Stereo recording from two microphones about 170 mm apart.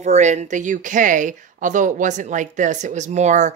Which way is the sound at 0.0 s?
45° right (ahead or behind).